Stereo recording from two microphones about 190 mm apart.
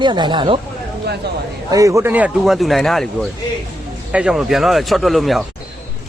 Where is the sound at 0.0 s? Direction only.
25° right (ahead or behind).